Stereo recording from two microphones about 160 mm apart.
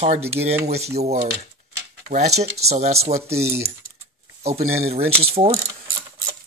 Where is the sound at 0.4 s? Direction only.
90° right.